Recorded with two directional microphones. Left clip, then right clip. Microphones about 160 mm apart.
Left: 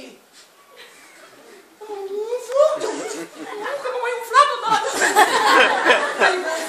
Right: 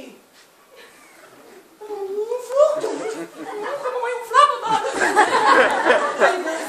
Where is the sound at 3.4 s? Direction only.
55° left (ahead or behind).